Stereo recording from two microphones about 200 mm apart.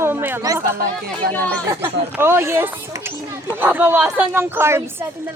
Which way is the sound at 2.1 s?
10° right (ahead or behind).